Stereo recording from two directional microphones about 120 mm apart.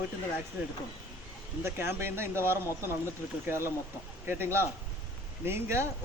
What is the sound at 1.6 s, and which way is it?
Speech, 20° right (ahead or behind).